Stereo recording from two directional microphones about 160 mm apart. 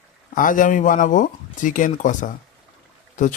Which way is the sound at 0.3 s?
55° left (ahead or behind).